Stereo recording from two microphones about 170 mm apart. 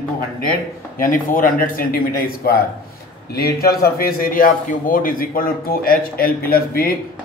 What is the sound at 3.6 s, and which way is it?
Speech, 65° left (ahead or behind).